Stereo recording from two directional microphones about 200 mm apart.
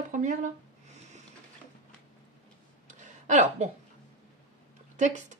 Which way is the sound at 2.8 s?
35° right (ahead or behind).